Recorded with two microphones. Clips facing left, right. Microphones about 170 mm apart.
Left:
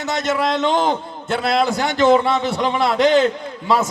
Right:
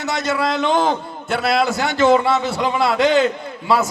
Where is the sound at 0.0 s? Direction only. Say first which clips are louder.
Left 1 dB; 20° left (ahead or behind).